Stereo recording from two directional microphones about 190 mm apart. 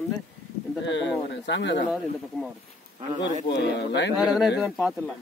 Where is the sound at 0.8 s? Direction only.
75° left (ahead or behind).